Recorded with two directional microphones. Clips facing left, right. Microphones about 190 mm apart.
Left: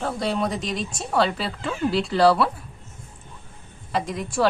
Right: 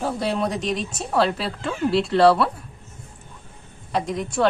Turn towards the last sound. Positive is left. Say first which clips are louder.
# right 1 dB
turn(degrees=0)  # may be behind; listen again after turning